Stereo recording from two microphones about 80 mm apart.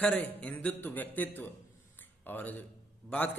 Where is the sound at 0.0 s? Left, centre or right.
Centre.